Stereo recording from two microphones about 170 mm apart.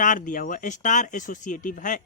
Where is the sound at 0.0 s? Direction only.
50° left (ahead or behind).